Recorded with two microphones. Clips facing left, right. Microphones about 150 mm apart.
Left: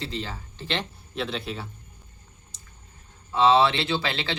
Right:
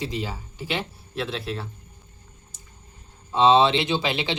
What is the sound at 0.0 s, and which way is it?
Speech, 15° right (ahead or behind).